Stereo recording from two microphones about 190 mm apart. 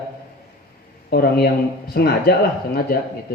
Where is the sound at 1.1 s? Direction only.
55° left (ahead or behind).